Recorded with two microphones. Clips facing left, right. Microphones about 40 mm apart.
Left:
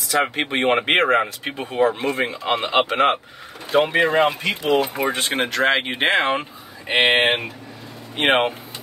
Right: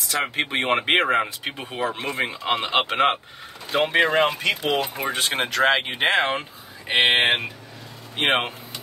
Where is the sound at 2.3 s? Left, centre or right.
Centre.